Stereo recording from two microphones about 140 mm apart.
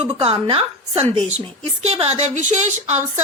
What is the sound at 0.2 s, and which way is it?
Speech, 40° right (ahead or behind).